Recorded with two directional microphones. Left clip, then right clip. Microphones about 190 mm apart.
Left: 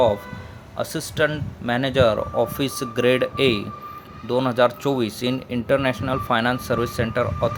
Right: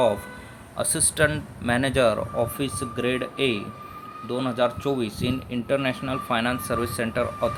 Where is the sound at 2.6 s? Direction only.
30° left (ahead or behind).